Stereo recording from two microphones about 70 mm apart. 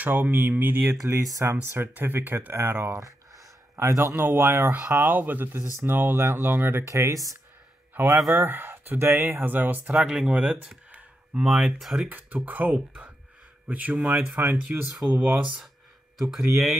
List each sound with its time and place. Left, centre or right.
0.0 s speech: right
1.0 s speech: right
1.4 s speech: right
6.9 s speech: right
8.3 s speech: right
9.4 s speech: right
9.9 s speech: centre
10.9 s a sound: centre
11.4 s speech: centre
12.1 s speech: right
16.2 s speech: centre